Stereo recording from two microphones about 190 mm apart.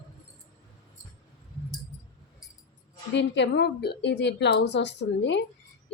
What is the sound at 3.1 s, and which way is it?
A woman's voice, 65° left (ahead or behind).